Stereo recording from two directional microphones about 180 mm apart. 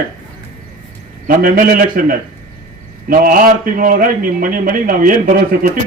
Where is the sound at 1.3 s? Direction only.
50° right (ahead or behind).